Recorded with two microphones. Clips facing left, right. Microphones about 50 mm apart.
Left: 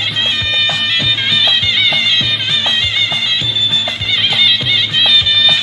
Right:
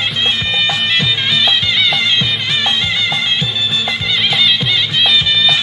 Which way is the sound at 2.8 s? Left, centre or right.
Left.